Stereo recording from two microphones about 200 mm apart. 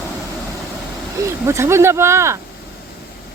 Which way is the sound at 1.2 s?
15° right (ahead or behind).